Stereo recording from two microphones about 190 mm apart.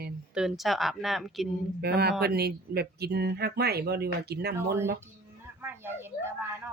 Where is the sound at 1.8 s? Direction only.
60° right (ahead or behind).